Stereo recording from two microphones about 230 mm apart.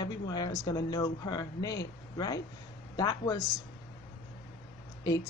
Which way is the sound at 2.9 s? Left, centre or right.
Centre.